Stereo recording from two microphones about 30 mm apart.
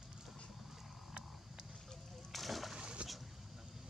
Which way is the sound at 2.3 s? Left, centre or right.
Centre.